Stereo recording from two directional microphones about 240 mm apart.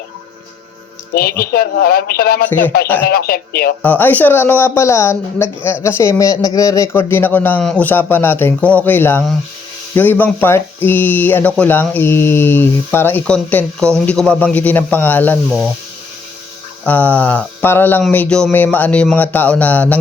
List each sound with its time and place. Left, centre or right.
1.1 s speech: left
2.5 s speech: centre
3.1 s speech: left
3.8 s speech: centre
15.4 s speech: centre
16.8 s speech: centre